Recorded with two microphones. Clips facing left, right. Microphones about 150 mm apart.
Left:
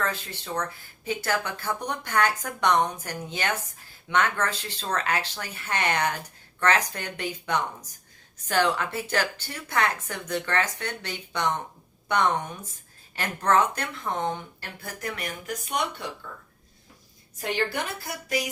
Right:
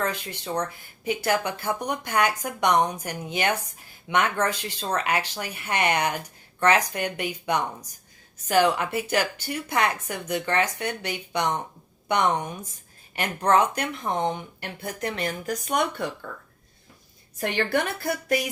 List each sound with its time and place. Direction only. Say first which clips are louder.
0.0 s speech: right 2 dB; 15° right (ahead or behind)
15.4 s speech: right 3 dB; 45° right (ahead or behind)
17.4 s a woman's voice: right 4 dB; 60° right (ahead or behind)